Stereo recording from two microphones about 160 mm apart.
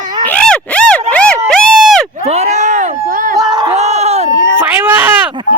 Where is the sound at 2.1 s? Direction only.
45° right (ahead or behind).